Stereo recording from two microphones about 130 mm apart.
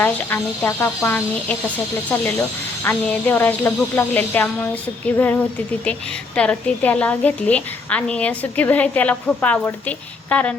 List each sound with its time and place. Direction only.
0.0 s a woman's voice: 15° left (ahead or behind)